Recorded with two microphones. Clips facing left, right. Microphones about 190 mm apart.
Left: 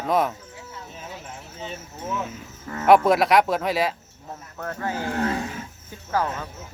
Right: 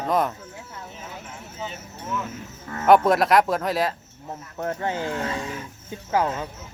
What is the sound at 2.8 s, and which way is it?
Speech, centre (ahead or behind).